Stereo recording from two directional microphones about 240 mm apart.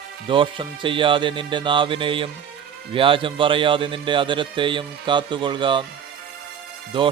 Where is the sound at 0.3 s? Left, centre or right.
Right.